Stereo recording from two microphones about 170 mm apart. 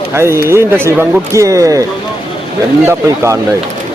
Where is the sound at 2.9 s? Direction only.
15° right (ahead or behind).